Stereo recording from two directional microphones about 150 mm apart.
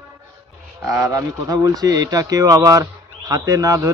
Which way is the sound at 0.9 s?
20° right (ahead or behind).